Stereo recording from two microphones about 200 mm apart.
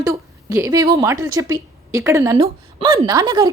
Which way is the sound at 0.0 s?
15° right (ahead or behind).